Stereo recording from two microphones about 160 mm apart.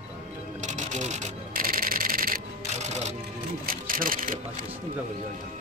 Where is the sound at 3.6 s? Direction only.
60° right (ahead or behind).